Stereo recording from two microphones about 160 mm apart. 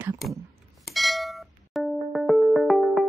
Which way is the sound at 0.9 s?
Centre (ahead or behind).